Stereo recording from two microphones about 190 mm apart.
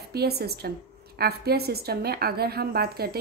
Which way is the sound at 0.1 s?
55° right (ahead or behind).